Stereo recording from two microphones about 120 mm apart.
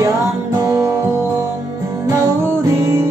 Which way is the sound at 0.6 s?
25° right (ahead or behind).